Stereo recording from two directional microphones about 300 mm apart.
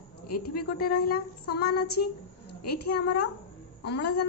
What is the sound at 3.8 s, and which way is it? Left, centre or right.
Speech, left.